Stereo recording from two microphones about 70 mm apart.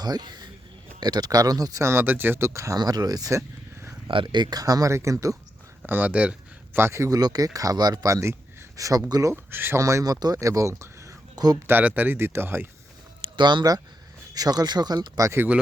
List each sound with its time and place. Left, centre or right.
0.0 s speech: right
1.8 s speech: right
2.7 s speech: right
4.0 s speech: right
4.9 s speech: right
5.8 s speech: right
6.7 s speech: right
7.1 s speech: right
9.3 s speech: right
9.7 s speech: right
11.6 s speech: right
12.1 s speech: right
13.2 s speech: right